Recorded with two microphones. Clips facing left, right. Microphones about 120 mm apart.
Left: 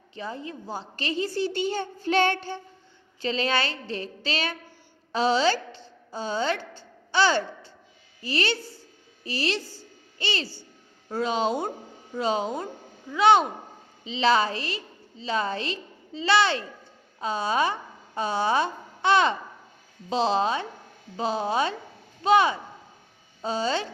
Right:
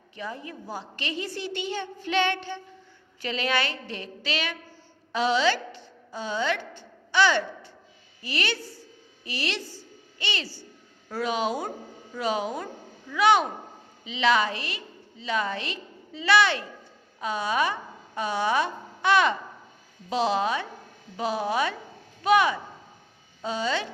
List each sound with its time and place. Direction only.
0.2 s a woman's voice: 30° left (ahead or behind)